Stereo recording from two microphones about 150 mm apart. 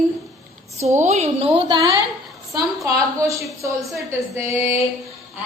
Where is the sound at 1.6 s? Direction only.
30° right (ahead or behind).